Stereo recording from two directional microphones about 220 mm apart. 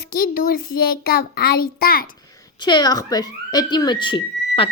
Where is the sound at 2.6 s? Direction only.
20° left (ahead or behind).